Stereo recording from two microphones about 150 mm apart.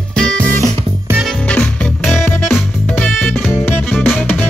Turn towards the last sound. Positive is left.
turn(degrees=15)  # may be behind; listen again after turning